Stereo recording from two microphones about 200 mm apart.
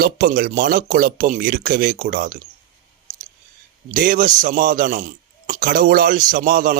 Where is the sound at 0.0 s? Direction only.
45° right (ahead or behind).